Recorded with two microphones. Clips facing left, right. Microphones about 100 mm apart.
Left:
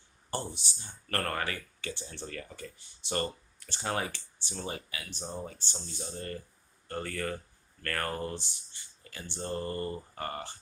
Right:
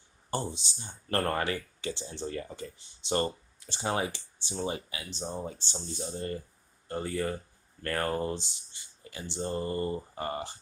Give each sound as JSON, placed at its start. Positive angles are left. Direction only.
{"t": 0.6, "sound": "speech", "side_deg": -20}